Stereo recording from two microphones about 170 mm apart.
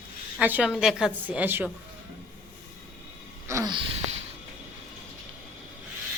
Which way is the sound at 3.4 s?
20° right (ahead or behind).